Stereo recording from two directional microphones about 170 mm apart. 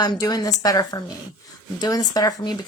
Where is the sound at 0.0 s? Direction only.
25° left (ahead or behind).